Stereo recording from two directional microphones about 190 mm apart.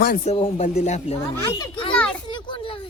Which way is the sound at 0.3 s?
30° left (ahead or behind).